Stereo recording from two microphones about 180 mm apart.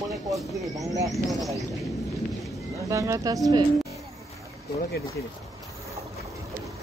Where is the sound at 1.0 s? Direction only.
Centre (ahead or behind).